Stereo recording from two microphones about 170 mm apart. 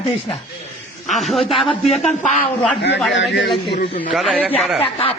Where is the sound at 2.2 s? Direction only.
45° left (ahead or behind).